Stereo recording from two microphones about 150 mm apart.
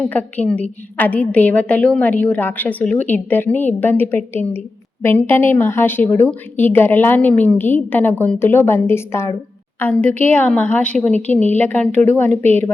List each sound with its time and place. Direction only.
0.1 s a woman's voice: 10° left (ahead or behind)
12.3 s a woman's voice: 50° right (ahead or behind)